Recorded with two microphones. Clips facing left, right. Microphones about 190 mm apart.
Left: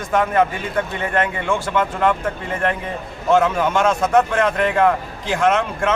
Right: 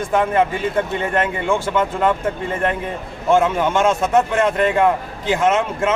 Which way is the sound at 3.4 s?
20° right (ahead or behind).